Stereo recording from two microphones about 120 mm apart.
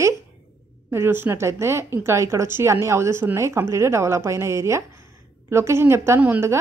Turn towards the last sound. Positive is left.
turn(degrees=-15)  # may be behind; listen again after turning